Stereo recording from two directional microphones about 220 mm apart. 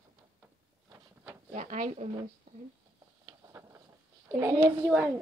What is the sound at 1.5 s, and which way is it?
Speech, 35° right (ahead or behind).